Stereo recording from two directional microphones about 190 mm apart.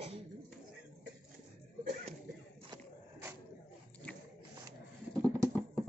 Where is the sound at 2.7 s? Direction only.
15° right (ahead or behind).